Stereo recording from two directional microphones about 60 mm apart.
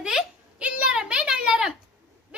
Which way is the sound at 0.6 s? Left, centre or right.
Centre.